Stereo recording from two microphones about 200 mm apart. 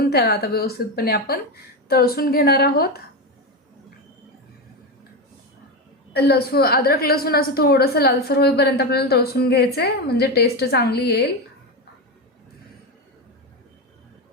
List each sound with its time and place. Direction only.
0.1 s a woman's voice: 55° left (ahead or behind)
6.1 s a woman's voice: 55° left (ahead or behind)